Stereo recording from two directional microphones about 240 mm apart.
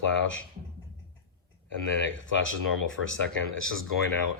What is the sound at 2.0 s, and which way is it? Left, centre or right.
Speech, left.